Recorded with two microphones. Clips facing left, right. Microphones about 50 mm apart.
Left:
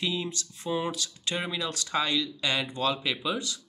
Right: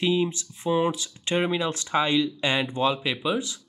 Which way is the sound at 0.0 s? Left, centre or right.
Right.